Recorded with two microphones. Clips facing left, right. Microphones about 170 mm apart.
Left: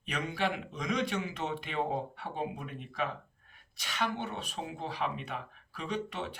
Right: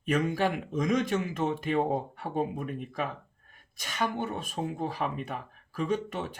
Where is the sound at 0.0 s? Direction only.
45° right (ahead or behind).